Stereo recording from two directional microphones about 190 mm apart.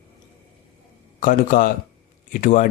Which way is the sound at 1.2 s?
45° left (ahead or behind).